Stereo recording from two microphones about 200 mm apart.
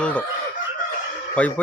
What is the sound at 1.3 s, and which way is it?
Speech, 5° left (ahead or behind).